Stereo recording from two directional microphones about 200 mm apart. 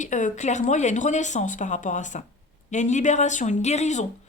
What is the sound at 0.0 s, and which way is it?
Speech, 40° left (ahead or behind).